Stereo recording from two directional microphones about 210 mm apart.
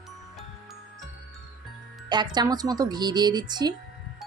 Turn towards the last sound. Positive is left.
turn(degrees=-20)  # may be behind; listen again after turning